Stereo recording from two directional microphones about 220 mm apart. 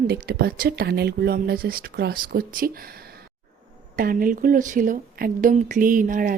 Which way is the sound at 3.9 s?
40° right (ahead or behind).